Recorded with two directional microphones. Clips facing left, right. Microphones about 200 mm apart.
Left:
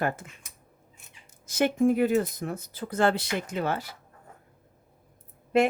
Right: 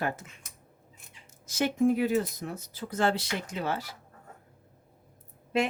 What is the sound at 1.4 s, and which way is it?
A woman's voice, 55° left (ahead or behind).